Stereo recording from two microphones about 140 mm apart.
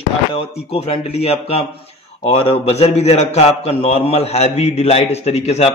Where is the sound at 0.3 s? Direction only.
45° left (ahead or behind).